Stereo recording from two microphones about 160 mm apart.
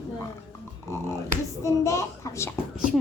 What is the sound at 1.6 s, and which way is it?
Speech, 20° left (ahead or behind).